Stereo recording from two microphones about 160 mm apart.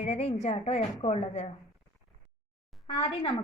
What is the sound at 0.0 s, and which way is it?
A woman's voice, 45° left (ahead or behind).